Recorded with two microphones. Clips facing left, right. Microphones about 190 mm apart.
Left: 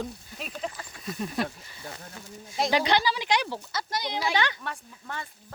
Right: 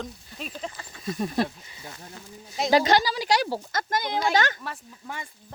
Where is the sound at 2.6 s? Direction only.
40° right (ahead or behind).